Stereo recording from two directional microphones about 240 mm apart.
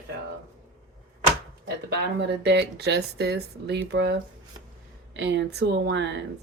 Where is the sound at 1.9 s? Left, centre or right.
Right.